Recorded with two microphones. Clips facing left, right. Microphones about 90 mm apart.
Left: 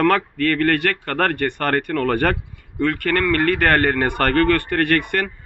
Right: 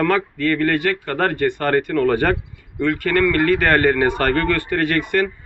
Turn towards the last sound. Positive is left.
turn(degrees=55)  # may be behind; listen again after turning